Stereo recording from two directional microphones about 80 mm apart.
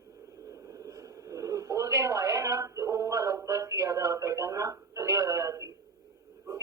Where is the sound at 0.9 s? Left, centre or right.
Right.